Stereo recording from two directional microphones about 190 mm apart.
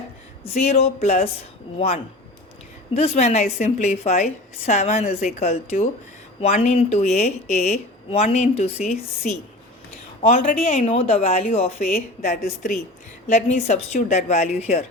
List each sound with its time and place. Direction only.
0.7 s a woman's voice: 35° left (ahead or behind)
2.9 s a woman's voice: 35° left (ahead or behind)
10.2 s a woman's voice: 35° left (ahead or behind)